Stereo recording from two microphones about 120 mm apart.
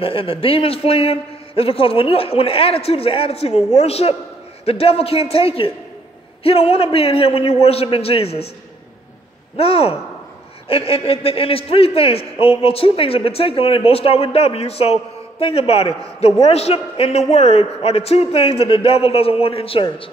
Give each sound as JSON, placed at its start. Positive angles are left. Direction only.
{"t": 0.0, "sound": "a man's voice", "side_deg": 50}
{"t": 9.6, "sound": "a man's voice", "side_deg": 55}